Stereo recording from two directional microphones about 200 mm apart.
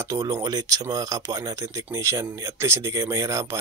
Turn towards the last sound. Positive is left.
turn(degrees=-15)  # may be behind; listen again after turning